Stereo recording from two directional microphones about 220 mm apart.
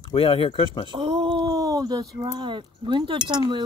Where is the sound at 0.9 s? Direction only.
20° right (ahead or behind).